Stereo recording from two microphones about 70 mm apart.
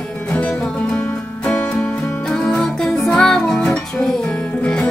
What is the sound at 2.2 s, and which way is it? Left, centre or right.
Music, centre.